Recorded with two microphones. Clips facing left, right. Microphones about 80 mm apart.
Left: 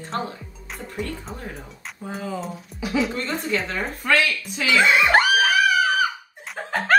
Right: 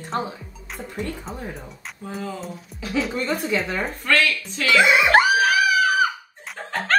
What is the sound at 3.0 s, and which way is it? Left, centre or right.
Speech, centre.